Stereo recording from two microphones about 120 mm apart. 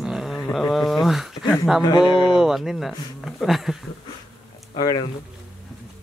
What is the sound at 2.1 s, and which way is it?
Speech, 40° left (ahead or behind).